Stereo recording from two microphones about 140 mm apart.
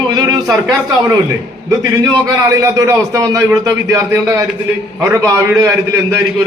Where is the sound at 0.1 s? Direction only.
30° right (ahead or behind).